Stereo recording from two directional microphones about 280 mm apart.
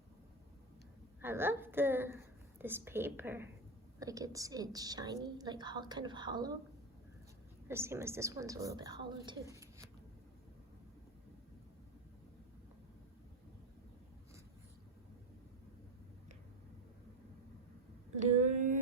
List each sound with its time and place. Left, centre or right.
1.2 s a woman's voice: centre
7.7 s a woman's voice: centre
18.2 s a sound: right